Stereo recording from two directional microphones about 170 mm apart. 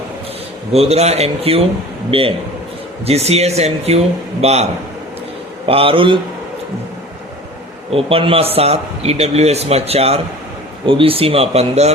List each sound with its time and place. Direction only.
0.7 s speech: 35° right (ahead or behind)
7.9 s speech: 35° right (ahead or behind)